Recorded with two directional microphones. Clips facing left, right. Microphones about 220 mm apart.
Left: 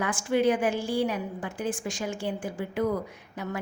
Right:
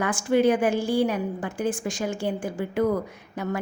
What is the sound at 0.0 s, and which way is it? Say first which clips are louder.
A woman's voice: right 4 dB; 45° right (ahead or behind).